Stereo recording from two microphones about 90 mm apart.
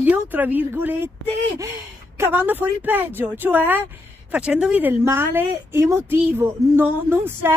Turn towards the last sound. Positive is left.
turn(degrees=-25)  # may be behind; listen again after turning